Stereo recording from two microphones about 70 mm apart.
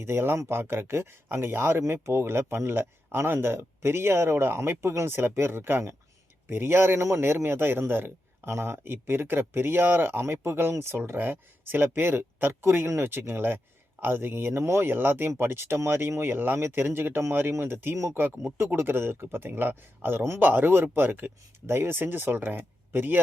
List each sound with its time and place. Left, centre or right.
0.0 s speech: right